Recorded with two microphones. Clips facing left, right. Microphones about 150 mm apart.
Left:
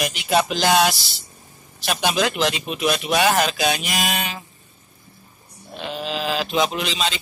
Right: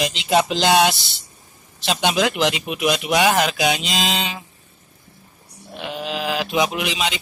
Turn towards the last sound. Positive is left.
turn(degrees=-15)  # may be behind; listen again after turning